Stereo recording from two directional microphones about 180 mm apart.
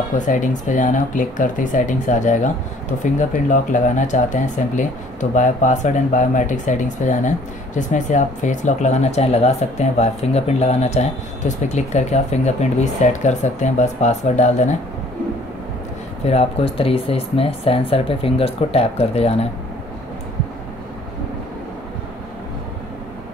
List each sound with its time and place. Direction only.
0.2 s speech: 45° left (ahead or behind)
16.3 s speech: 35° left (ahead or behind)